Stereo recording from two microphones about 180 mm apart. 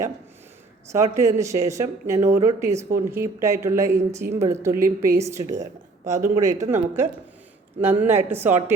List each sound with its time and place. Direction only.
0.9 s speech: 15° right (ahead or behind)
6.1 s speech: 40° right (ahead or behind)
6.3 s speech: 20° right (ahead or behind)